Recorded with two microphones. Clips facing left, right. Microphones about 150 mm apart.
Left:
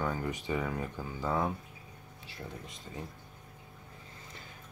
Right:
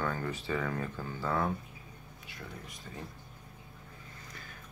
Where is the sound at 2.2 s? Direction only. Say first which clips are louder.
Left 2 dB; 25° left (ahead or behind).